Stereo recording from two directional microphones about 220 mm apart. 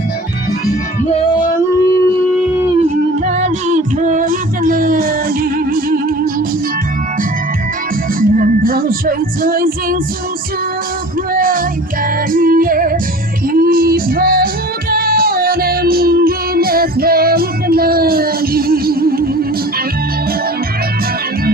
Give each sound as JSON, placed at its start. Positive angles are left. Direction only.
{"t": 3.2, "sound": "music", "side_deg": -30}
{"t": 8.2, "sound": "music", "side_deg": -40}
{"t": 11.3, "sound": "music", "side_deg": -40}
{"t": 12.3, "sound": "yodeling", "side_deg": -40}
{"t": 13.5, "sound": "music", "side_deg": -40}